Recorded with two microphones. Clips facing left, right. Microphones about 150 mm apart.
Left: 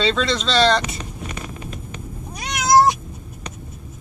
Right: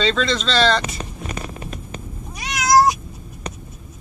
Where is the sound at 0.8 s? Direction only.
40° right (ahead or behind).